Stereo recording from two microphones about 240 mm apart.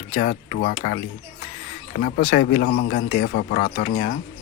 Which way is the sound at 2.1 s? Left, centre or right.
Left.